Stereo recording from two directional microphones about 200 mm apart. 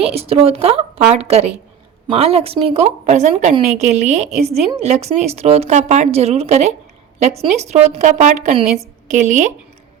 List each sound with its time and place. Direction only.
0.0 s a woman's voice: 30° right (ahead or behind)